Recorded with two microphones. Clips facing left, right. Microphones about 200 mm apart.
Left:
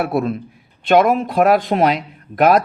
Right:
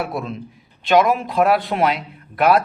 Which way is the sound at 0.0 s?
60° left (ahead or behind).